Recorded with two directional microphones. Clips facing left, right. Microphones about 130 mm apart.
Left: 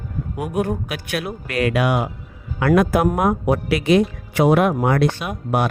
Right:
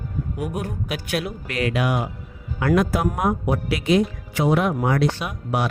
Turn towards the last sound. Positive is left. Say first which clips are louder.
# left 3 dB
turn(degrees=50)  # may be behind; listen again after turning